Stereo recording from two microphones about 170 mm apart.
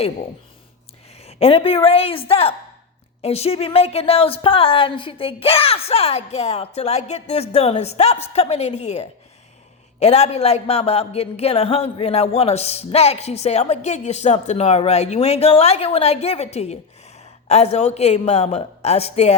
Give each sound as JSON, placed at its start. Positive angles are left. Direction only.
{"t": 1.1, "sound": "a woman's voice", "side_deg": 35}